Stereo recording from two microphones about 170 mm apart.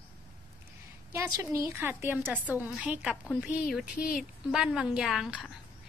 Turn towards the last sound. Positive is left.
turn(degrees=-5)  # may be behind; listen again after turning